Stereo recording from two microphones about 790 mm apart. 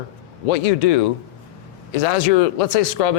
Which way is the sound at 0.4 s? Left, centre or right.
Left.